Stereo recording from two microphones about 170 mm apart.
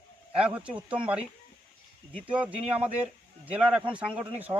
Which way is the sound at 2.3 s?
10° right (ahead or behind).